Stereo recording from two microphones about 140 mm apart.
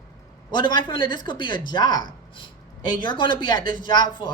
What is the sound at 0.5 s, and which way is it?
Speech, 35° left (ahead or behind).